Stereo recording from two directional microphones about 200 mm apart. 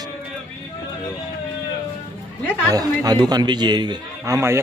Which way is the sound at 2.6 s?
20° right (ahead or behind).